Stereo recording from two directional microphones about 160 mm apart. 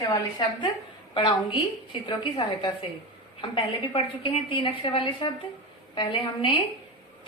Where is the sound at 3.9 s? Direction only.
35° left (ahead or behind).